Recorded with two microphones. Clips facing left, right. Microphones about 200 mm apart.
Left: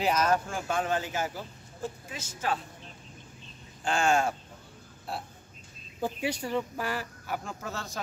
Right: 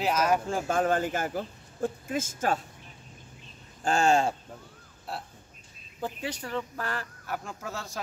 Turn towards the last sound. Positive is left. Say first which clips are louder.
# even
turn(degrees=-5)  # may be behind; listen again after turning